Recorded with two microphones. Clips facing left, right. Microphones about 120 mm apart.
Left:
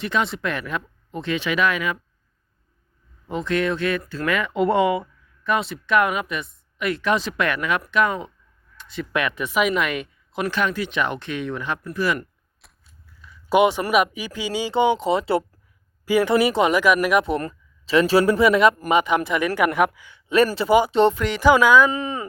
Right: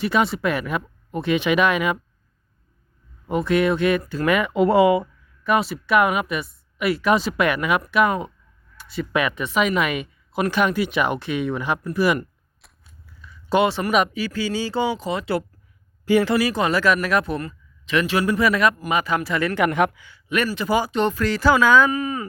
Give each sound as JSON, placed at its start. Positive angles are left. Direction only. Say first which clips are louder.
{"t": 0.0, "sound": "speech", "louder": "right 3 dB", "side_deg": -5}
{"t": 3.2, "sound": "speech", "louder": "right 3 dB", "side_deg": -10}
{"t": 12.6, "sound": "scissors", "louder": "even", "side_deg": 0}
{"t": 13.5, "sound": "speech", "louder": "left 2 dB", "side_deg": 15}
{"t": 16.0, "sound": "speech", "louder": "right 1 dB", "side_deg": 10}
{"t": 16.3, "sound": "speech", "louder": "left 2 dB", "side_deg": 25}
{"t": 17.4, "sound": "speech", "louder": "left 3 dB", "side_deg": 35}
{"t": 20.1, "sound": "speech", "louder": "left 6 dB", "side_deg": 30}
{"t": 21.8, "sound": "speech", "louder": "right 1 dB", "side_deg": 25}